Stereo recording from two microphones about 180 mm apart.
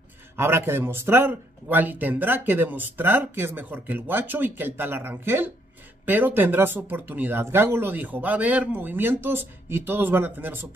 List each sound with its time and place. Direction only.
0.4 s a man's voice: 15° right (ahead or behind)